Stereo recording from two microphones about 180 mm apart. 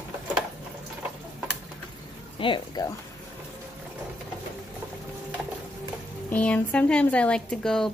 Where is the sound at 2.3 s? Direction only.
30° left (ahead or behind).